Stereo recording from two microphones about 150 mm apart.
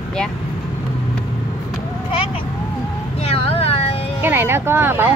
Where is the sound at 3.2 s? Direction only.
40° left (ahead or behind).